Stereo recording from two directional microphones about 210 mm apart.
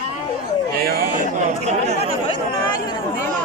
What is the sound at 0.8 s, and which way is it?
Speech, 45° right (ahead or behind).